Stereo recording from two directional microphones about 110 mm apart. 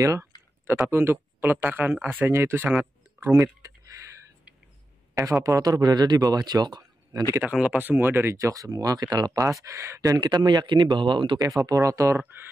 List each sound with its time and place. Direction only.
0.0 s speech: 30° right (ahead or behind)
2.8 s a sound: 20° right (ahead or behind)
5.1 s speech: 30° right (ahead or behind)
7.4 s speech: 10° right (ahead or behind); by 12.2 s 30° right (ahead or behind)